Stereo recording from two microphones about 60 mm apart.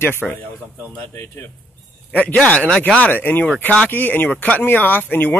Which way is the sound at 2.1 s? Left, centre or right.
Left.